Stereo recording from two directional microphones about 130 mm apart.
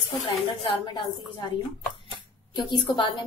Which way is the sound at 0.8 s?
40° left (ahead or behind).